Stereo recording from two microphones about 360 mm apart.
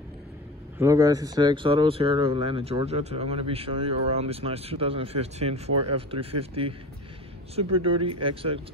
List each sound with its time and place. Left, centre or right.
0.7 s speech: centre
7.5 s speech: centre